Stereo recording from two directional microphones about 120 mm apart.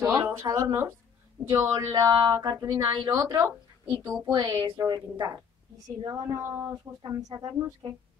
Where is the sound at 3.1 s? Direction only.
30° right (ahead or behind).